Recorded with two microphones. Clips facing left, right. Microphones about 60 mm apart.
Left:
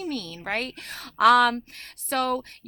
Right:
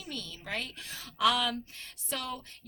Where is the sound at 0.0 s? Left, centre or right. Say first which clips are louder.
Left 10 dB; left.